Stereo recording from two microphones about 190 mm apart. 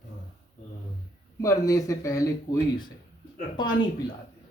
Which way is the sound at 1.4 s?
15° left (ahead or behind).